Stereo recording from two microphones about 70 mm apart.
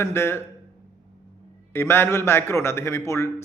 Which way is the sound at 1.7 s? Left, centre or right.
Left.